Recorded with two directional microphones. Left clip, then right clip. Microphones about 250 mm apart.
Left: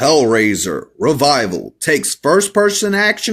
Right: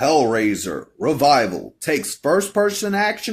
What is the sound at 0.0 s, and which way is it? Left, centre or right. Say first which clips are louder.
Speech: left 5 dB; left.